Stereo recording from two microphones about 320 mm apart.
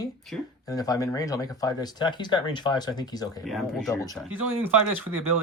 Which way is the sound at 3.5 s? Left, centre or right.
Centre.